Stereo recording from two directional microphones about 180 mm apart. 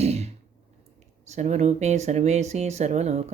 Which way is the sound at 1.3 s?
40° right (ahead or behind).